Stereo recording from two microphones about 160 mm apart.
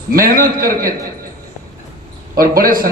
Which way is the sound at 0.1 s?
65° right (ahead or behind).